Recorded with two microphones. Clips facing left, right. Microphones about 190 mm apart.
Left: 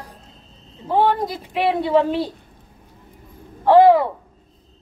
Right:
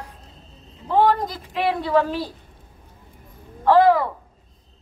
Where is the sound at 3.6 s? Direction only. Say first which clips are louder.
Left 4 dB; 25° left (ahead or behind).